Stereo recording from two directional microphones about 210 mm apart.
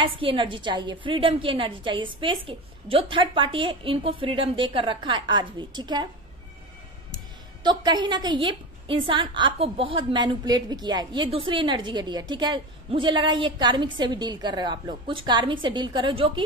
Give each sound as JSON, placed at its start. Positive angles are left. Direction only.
{"t": 0.0, "sound": "a woman's voice", "side_deg": -25}
{"t": 7.6, "sound": "a woman's voice", "side_deg": -20}